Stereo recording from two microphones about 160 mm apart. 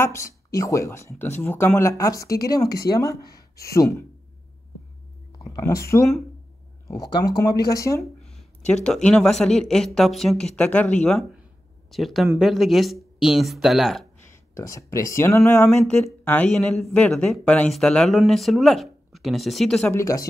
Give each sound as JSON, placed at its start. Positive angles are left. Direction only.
{"t": 0.0, "sound": "speech", "side_deg": 20}
{"t": 5.4, "sound": "speech", "side_deg": 20}
{"t": 8.2, "sound": "a sound", "side_deg": 0}
{"t": 8.8, "sound": "speech", "side_deg": 5}
{"t": 14.2, "sound": "speech", "side_deg": 20}
{"t": 19.9, "sound": "speech", "side_deg": 20}